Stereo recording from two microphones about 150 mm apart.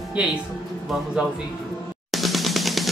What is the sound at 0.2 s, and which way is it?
Speech, 5° right (ahead or behind).